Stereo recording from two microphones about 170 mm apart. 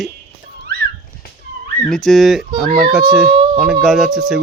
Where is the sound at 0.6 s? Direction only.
70° right (ahead or behind).